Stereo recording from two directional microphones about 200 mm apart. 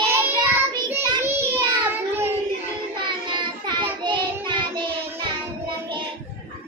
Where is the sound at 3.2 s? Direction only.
25° right (ahead or behind).